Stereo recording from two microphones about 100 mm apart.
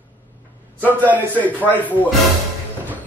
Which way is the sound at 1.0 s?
15° right (ahead or behind).